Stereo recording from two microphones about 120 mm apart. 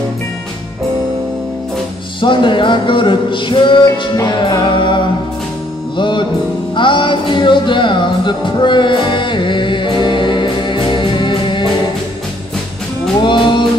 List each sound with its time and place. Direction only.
2.1 s music: 40° left (ahead or behind)
13.2 s music: 40° left (ahead or behind)